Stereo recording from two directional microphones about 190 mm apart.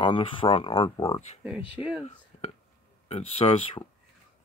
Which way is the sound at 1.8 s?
5° right (ahead or behind).